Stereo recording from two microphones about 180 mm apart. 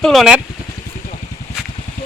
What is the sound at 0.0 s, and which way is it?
Speech, centre (ahead or behind).